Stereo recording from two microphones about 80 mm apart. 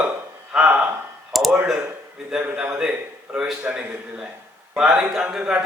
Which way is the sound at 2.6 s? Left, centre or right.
Centre.